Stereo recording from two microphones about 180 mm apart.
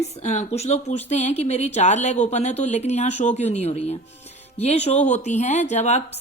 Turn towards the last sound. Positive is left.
turn(degrees=40)  # may be behind; listen again after turning